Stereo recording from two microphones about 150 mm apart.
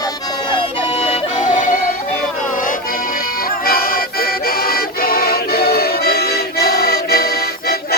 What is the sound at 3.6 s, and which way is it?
Music, 85° left.